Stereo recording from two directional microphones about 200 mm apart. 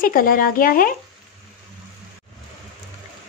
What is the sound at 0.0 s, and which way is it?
Speech, 45° left (ahead or behind).